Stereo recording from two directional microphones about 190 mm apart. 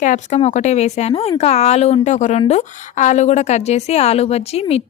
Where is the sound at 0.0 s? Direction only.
40° left (ahead or behind).